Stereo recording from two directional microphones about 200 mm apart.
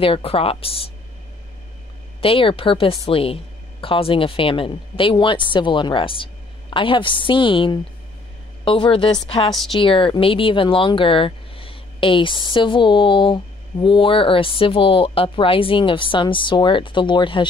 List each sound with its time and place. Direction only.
0.0 s speech: 25° left (ahead or behind)
2.2 s speech: 25° left (ahead or behind)